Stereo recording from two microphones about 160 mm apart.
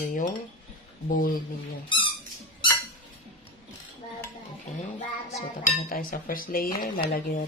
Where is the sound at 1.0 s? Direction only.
55° left (ahead or behind).